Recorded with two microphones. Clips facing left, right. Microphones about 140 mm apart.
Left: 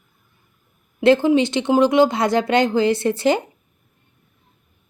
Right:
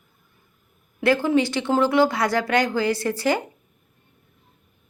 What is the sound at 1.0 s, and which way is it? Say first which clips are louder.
Speech: left 5 dB; 20° left (ahead or behind).